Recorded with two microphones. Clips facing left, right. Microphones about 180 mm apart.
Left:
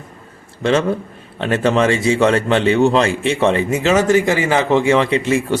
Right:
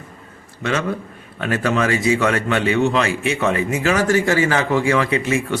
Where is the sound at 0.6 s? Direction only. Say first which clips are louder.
Left 6 dB; 30° left (ahead or behind).